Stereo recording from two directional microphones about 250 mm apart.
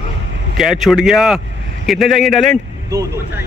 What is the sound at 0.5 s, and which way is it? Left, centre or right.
A man's voice, centre.